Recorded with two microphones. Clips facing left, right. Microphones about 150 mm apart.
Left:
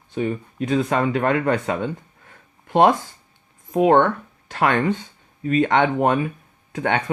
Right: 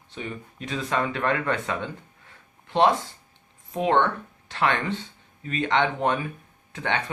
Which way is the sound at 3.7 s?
45° left (ahead or behind).